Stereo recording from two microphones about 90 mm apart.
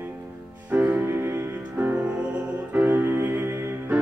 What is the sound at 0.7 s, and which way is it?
Music, 20° right (ahead or behind).